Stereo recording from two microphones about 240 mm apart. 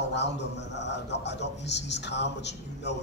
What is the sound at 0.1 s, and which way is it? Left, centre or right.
A man's voice, left.